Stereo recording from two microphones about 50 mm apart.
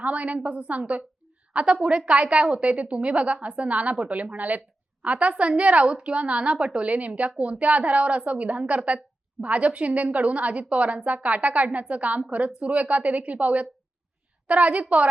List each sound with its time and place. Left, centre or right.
0.0 s a woman's voice: right